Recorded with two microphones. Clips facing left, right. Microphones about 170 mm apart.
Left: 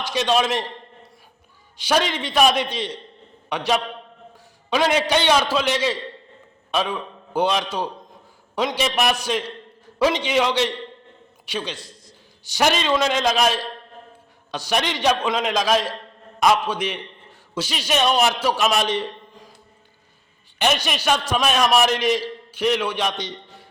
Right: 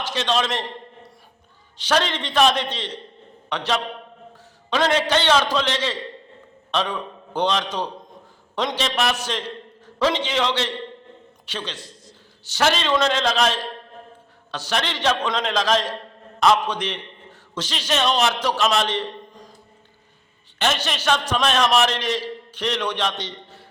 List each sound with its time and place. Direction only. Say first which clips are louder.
0.0 s a man's voice: left 3 dB; 10° left (ahead or behind)
1.8 s a man's voice: left 1 dB; 10° left (ahead or behind)
20.6 s a man's voice: left 2 dB; 15° left (ahead or behind)